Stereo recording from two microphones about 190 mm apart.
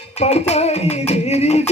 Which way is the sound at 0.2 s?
35° left (ahead or behind).